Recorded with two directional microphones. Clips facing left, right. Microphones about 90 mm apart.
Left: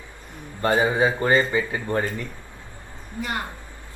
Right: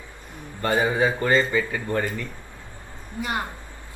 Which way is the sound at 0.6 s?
15° left (ahead or behind).